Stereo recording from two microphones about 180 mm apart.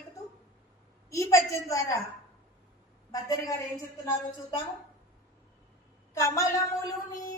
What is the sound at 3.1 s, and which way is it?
Speech, 20° left (ahead or behind).